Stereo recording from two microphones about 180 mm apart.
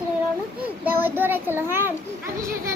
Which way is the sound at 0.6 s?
10° right (ahead or behind).